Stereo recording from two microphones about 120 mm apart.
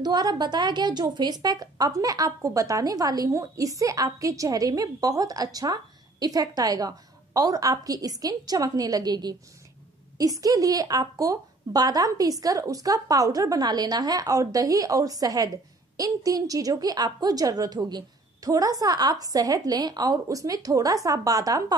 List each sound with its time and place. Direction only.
0.0 s a woman's voice: 35° right (ahead or behind)